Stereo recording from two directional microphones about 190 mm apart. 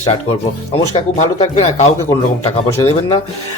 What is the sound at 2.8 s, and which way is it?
Speech, 20° left (ahead or behind).